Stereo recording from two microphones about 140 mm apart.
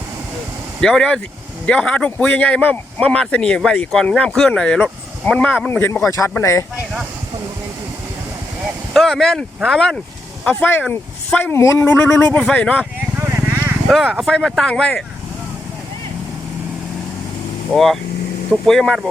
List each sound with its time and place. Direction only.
0.8 s speech: 5° left (ahead or behind); by 6.7 s 20° left (ahead or behind)
8.9 s speech: centre (ahead or behind)
13.1 s vehicle: 15° right (ahead or behind)
13.8 s speech: centre (ahead or behind)
17.7 s speech: centre (ahead or behind)